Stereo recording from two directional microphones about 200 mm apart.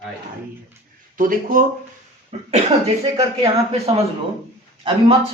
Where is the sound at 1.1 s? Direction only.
45° right (ahead or behind).